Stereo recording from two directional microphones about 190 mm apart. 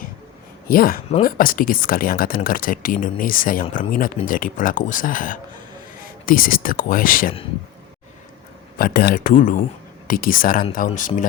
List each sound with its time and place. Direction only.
0.7 s speech: 50° left (ahead or behind)
8.8 s speech: 55° left (ahead or behind)